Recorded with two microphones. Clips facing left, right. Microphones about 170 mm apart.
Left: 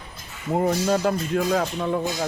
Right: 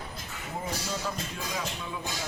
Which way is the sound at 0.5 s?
65° left (ahead or behind).